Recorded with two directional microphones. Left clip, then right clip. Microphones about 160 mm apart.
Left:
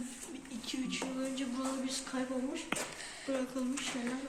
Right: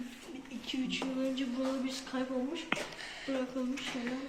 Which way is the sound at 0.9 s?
15° right (ahead or behind).